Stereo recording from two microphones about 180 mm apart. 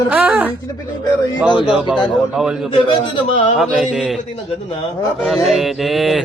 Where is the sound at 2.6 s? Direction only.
25° left (ahead or behind).